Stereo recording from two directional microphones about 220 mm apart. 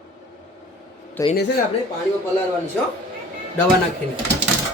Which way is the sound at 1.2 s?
15° left (ahead or behind).